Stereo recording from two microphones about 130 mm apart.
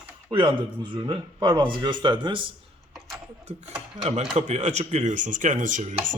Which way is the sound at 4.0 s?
50° right (ahead or behind).